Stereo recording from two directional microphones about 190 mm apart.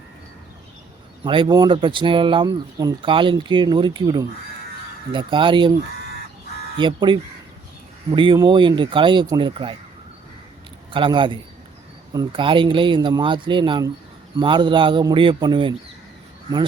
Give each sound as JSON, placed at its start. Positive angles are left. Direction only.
{"t": 1.2, "sound": "speech", "side_deg": -25}
{"t": 6.7, "sound": "speech", "side_deg": -25}
{"t": 10.9, "sound": "speech", "side_deg": -25}